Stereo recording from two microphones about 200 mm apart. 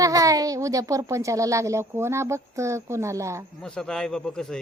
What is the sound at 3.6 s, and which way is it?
Speech, 5° left (ahead or behind).